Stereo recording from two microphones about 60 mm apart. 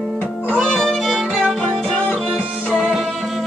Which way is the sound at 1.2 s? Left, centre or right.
Centre.